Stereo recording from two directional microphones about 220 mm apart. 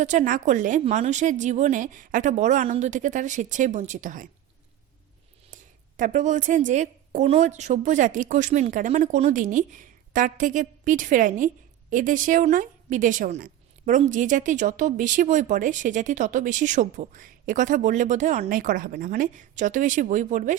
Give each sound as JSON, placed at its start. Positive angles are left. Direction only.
{"t": 0.0, "sound": "a woman's voice", "side_deg": -35}
{"t": 6.0, "sound": "a woman's voice", "side_deg": -35}